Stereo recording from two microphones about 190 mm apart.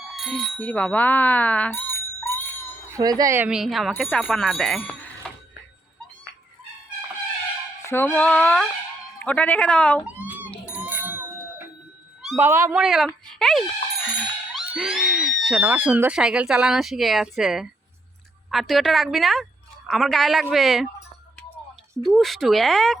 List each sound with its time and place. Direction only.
0.0 s speech: centre (ahead or behind)
2.9 s speech: 20° right (ahead or behind); by 4.9 s 5° left (ahead or behind)
7.9 s speech: 10° left (ahead or behind)
10.1 s cat: 10° right (ahead or behind)
10.7 s bicycle bell: 10° right (ahead or behind)
12.4 s speech: 15° right (ahead or behind)
12.8 s speech: centre (ahead or behind)
22.0 s speech: centre (ahead or behind)